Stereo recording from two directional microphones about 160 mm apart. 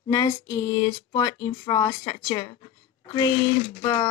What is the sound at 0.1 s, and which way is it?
Speech, 25° left (ahead or behind).